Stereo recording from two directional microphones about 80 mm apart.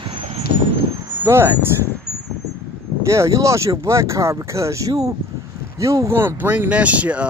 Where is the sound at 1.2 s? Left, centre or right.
Right.